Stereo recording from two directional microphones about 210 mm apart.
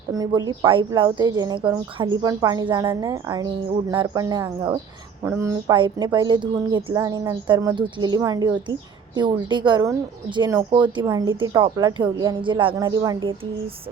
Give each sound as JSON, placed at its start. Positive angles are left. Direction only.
{"t": 0.1, "sound": "a woman's voice", "side_deg": -20}